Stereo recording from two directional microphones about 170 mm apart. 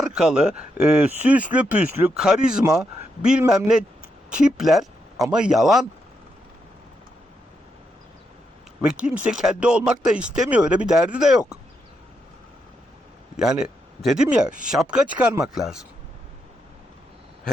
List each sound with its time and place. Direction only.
0.0 s speech: 5° right (ahead or behind)
8.8 s speech: 5° right (ahead or behind)
13.3 s speech: 5° right (ahead or behind)